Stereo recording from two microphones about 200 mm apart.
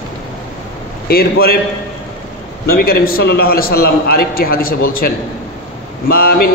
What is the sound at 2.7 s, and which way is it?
Speech, 50° left (ahead or behind).